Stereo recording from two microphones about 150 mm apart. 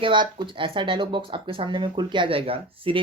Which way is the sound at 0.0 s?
30° right (ahead or behind).